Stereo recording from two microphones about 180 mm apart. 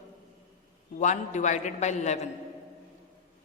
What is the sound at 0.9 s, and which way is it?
A woman's voice, 40° left (ahead or behind).